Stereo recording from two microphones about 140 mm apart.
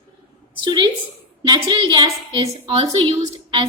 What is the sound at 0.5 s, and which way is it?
A woman's voice, 35° right (ahead or behind).